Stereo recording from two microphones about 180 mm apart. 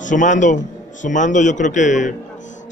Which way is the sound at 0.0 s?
45° left (ahead or behind).